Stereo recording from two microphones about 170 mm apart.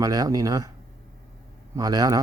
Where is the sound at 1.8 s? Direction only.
20° right (ahead or behind).